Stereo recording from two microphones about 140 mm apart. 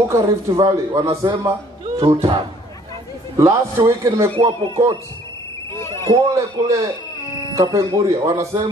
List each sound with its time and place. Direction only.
0.1 s speech: 20° right (ahead or behind)
2.0 s speech: 40° right (ahead or behind)
3.3 s speech: 25° right (ahead or behind)
4.4 s speech: 35° right (ahead or behind)
6.1 s speech: 25° right (ahead or behind)